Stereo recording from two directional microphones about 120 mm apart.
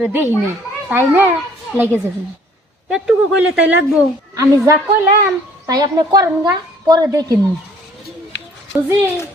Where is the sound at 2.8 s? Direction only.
5° right (ahead or behind).